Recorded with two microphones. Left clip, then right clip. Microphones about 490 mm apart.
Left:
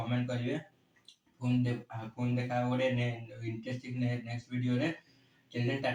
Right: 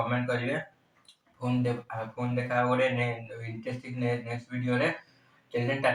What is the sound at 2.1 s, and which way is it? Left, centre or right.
Speech, left.